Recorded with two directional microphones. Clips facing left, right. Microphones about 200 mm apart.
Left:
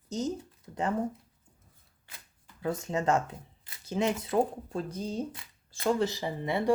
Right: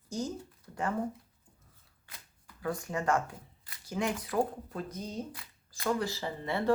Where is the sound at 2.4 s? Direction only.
25° left (ahead or behind).